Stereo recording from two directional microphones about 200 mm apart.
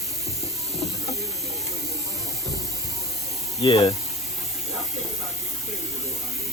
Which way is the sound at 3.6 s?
25° left (ahead or behind).